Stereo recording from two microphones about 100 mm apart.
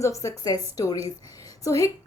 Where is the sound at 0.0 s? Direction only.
30° left (ahead or behind).